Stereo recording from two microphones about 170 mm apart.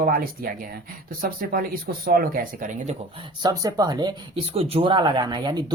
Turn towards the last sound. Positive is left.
turn(degrees=-25)  # may be behind; listen again after turning